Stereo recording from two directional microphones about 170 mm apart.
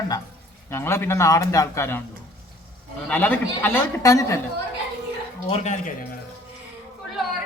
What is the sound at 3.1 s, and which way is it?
A man's voice, 10° left (ahead or behind).